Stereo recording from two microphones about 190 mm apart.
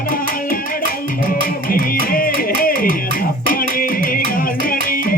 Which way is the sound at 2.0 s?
50° left (ahead or behind).